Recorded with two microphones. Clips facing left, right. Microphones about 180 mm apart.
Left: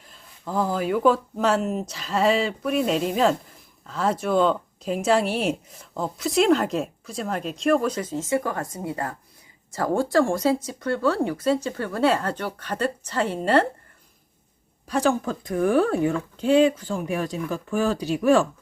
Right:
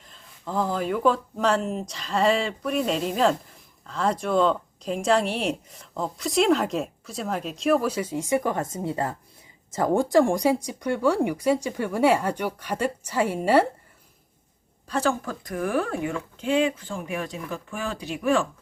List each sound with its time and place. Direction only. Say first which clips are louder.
0.1 s speech: left 1 dB; 5° left (ahead or behind)
14.8 s speech: left 3 dB; 15° left (ahead or behind); by 18.4 s 40° left (ahead or behind)